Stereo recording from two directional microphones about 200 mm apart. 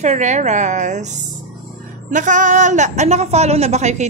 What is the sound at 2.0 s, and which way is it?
A woman's voice, 40° right (ahead or behind).